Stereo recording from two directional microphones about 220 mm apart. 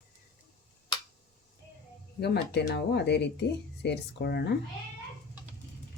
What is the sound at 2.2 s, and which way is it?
Speech, 50° left (ahead or behind).